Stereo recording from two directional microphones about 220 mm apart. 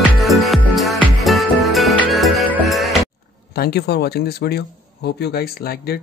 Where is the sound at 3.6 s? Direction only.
45° left (ahead or behind).